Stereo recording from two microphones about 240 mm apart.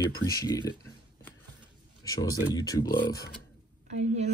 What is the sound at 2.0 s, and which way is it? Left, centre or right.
Speech, centre.